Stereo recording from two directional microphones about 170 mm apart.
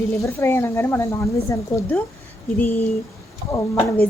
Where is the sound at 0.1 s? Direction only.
15° left (ahead or behind).